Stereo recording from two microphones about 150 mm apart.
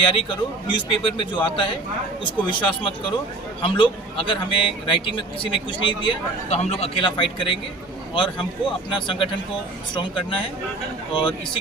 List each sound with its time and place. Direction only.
0.0 s a man's voice: 35° left (ahead or behind)